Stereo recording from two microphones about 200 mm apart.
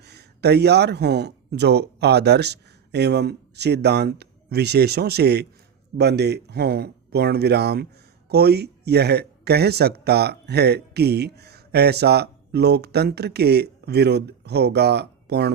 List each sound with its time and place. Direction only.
0.0 s speech: 55° right (ahead or behind)